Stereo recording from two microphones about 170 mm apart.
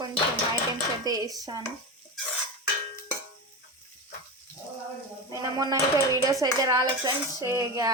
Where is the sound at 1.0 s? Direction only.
20° right (ahead or behind).